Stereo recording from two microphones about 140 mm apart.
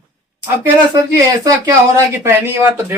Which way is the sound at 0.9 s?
25° right (ahead or behind).